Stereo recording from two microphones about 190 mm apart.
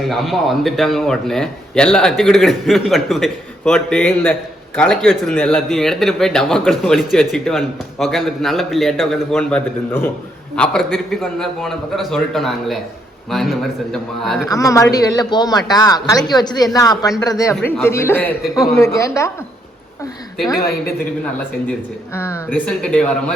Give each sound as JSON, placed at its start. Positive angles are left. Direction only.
{"t": 0.0, "sound": "a man's voice", "side_deg": 0}
{"t": 14.4, "sound": "a man's voice", "side_deg": 15}
{"t": 20.5, "sound": "speech", "side_deg": 15}
{"t": 22.1, "sound": "speech", "side_deg": 15}